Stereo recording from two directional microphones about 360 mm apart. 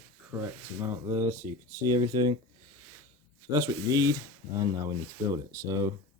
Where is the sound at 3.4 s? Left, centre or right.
Centre.